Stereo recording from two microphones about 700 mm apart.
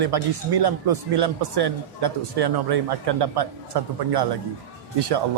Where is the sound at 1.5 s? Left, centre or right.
Right.